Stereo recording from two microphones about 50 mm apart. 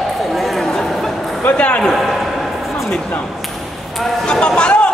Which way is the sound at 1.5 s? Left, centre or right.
Left.